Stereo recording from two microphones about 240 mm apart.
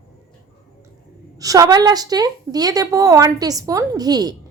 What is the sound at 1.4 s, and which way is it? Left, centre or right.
A woman's voice, centre.